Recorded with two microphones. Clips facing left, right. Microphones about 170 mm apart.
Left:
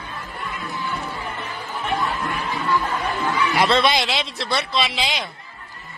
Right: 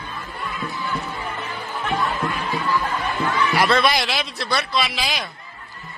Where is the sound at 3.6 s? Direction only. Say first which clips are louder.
Left 1 dB; 25° left (ahead or behind).